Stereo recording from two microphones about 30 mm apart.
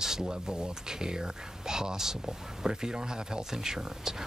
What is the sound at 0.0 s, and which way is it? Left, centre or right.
Speech, centre.